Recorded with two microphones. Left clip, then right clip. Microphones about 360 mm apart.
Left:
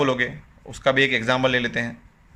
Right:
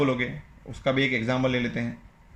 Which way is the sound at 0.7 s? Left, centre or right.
Left.